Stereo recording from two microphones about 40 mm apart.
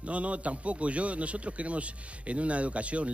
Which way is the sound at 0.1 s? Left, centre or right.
Right.